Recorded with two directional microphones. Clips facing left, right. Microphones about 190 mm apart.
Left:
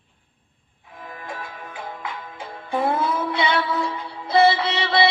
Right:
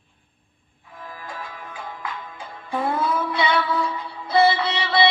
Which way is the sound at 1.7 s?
25° left (ahead or behind).